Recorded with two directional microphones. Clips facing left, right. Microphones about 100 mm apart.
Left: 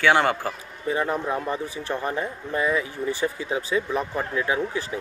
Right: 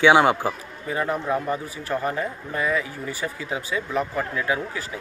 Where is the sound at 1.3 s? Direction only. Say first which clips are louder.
Right 2 dB; 25° left (ahead or behind).